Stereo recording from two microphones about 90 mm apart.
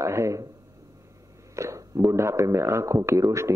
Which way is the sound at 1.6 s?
35° right (ahead or behind).